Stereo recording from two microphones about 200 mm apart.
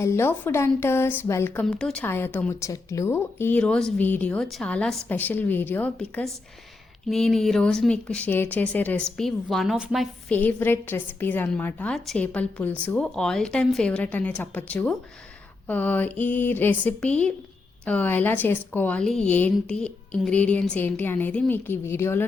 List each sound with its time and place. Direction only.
0.0 s a woman's voice: 10° left (ahead or behind)